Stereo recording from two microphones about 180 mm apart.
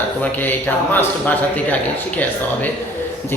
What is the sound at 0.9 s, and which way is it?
Speech, 10° left (ahead or behind).